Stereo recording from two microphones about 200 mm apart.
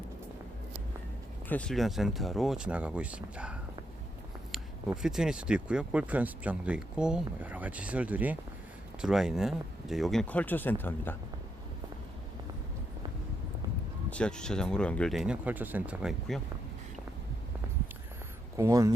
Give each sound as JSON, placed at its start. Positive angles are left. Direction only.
{"t": 1.5, "sound": "speech", "side_deg": 5}
{"t": 14.1, "sound": "speech", "side_deg": 5}
{"t": 18.5, "sound": "speech", "side_deg": -15}